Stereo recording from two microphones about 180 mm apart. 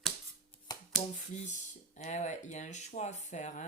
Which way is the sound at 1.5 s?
40° left (ahead or behind).